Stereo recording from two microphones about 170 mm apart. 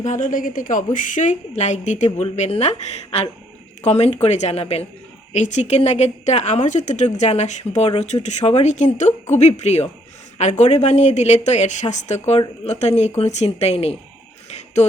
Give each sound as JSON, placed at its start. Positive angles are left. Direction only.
{"t": 0.0, "sound": "a woman's voice", "side_deg": 50}